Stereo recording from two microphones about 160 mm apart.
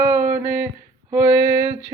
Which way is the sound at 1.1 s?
15° right (ahead or behind).